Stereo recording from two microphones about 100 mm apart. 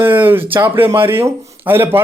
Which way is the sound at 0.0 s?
20° right (ahead or behind).